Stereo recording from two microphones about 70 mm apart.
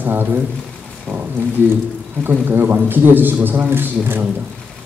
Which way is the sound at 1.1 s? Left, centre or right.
Centre.